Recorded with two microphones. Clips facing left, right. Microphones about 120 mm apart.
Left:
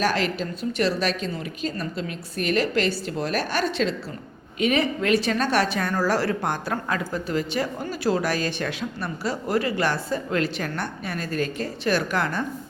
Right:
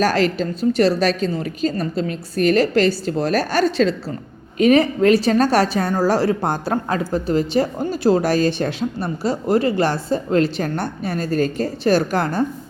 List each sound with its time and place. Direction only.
0.0 s a woman's voice: 35° right (ahead or behind)